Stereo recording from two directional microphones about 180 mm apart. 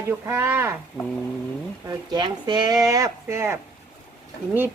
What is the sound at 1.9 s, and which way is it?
Speech, 25° right (ahead or behind).